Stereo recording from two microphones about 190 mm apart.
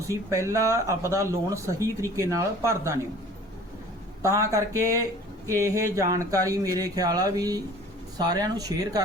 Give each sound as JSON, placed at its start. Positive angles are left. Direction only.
{"t": 0.1, "sound": "speech", "side_deg": -15}
{"t": 4.2, "sound": "speech", "side_deg": -15}